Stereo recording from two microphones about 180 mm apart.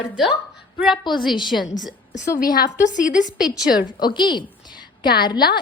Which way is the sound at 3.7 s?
55° left (ahead or behind).